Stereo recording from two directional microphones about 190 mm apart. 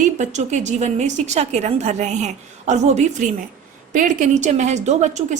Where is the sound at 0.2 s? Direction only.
40° right (ahead or behind).